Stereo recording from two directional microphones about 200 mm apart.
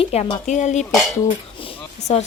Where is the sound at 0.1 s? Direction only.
30° left (ahead or behind).